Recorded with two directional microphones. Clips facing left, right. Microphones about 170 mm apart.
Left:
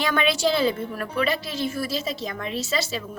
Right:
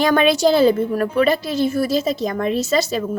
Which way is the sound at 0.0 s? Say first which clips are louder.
Right 8 dB; 40° right (ahead or behind).